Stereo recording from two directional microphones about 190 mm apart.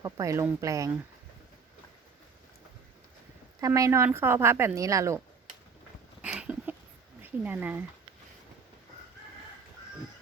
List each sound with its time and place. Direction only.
0.0 s speech: 15° right (ahead or behind)
3.6 s speech: 15° right (ahead or behind)
6.2 s a sound: 5° right (ahead or behind)
7.2 s speech: 10° right (ahead or behind)